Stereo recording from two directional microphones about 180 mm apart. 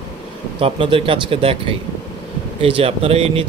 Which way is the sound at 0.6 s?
30° right (ahead or behind).